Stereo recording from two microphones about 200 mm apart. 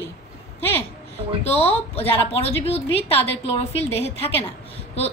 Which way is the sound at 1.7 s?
30° left (ahead or behind).